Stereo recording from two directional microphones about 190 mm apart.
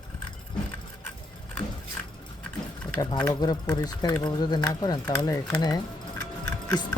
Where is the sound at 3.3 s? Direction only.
20° left (ahead or behind).